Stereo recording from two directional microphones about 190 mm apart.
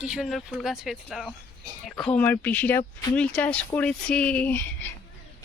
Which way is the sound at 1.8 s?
Centre (ahead or behind).